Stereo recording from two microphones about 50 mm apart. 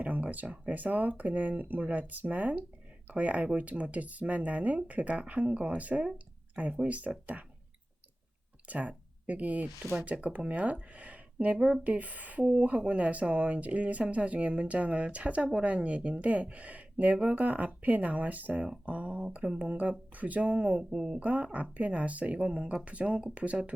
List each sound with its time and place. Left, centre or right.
0.0 s speech: right
8.6 s speech: right
11.5 s speech: centre
11.8 s speech: right
20.9 s speech: centre
21.2 s speech: right